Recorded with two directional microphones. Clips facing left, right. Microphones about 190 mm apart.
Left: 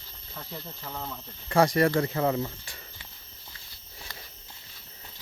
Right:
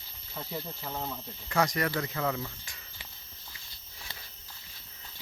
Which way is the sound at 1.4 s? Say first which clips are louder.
Left 7 dB; 30° left (ahead or behind).